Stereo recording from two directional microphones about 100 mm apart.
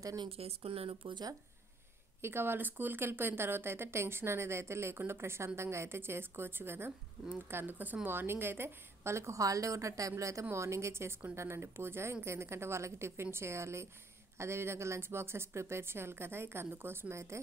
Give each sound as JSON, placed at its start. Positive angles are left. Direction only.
{"t": 0.0, "sound": "speech", "side_deg": -40}
{"t": 0.3, "sound": "speech", "side_deg": -80}
{"t": 2.2, "sound": "a woman's voice", "side_deg": -20}